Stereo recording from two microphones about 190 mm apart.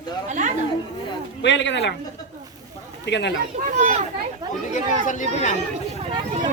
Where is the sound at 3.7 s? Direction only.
40° right (ahead or behind).